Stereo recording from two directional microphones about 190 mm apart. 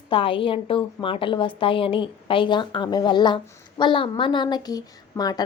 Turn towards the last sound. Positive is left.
turn(degrees=20)  # may be behind; listen again after turning